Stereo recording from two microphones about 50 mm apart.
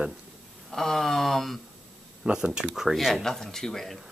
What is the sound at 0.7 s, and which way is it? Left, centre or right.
Speech, centre.